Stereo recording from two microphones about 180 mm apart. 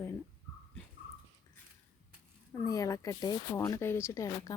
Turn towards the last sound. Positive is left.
turn(degrees=15)  # may be behind; listen again after turning